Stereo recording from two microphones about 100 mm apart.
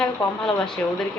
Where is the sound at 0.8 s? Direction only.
20° left (ahead or behind).